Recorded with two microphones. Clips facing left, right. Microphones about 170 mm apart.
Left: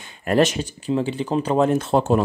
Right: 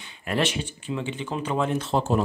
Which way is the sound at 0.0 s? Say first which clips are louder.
Left 8 dB; 45° left (ahead or behind).